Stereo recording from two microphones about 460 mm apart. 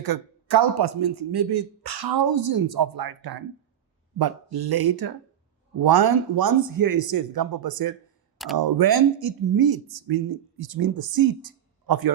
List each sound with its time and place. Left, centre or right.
0.0 s a man's voice: right